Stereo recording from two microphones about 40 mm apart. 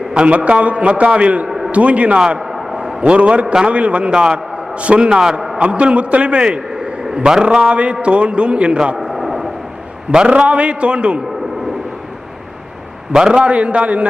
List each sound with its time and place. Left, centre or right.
0.3 s a man's voice: right
1.5 s a sound: centre
1.7 s a man's voice: right
2.5 s a sound: centre
3.0 s a man's voice: right
3.4 s a man's voice: centre
3.7 s a man's voice: right
4.1 s a man's voice: centre
5.5 s a man's voice: right
9.0 s a sound: centre
10.1 s a man's voice: right
13.1 s a man's voice: centre
13.4 s a man's voice: right